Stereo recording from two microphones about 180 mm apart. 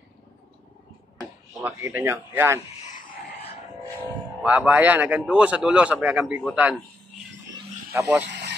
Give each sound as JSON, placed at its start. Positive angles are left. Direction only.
{"t": 1.6, "sound": "a man's voice", "side_deg": -10}
{"t": 4.4, "sound": "a man's voice", "side_deg": -5}
{"t": 7.9, "sound": "a man's voice", "side_deg": -10}
{"t": 8.3, "sound": "radio", "side_deg": -75}